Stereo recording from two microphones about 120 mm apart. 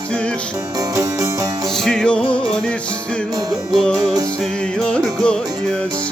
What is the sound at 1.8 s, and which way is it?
Music, 5° left (ahead or behind).